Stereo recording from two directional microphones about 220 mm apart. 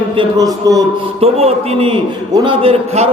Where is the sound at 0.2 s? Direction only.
15° right (ahead or behind).